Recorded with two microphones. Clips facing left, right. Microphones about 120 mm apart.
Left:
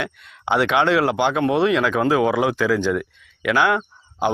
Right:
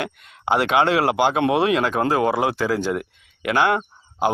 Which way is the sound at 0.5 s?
45° right (ahead or behind).